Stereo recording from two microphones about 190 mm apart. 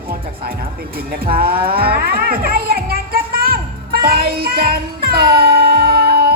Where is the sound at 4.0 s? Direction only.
50° right (ahead or behind).